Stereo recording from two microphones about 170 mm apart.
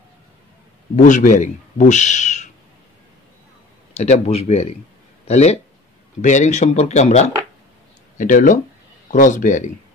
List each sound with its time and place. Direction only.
0.9 s speech: 45° left (ahead or behind)
3.9 s a man's voice: 40° left (ahead or behind)